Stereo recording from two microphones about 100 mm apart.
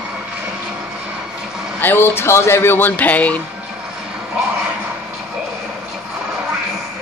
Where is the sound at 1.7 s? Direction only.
20° left (ahead or behind).